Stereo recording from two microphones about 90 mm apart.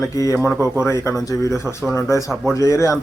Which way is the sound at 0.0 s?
40° left (ahead or behind).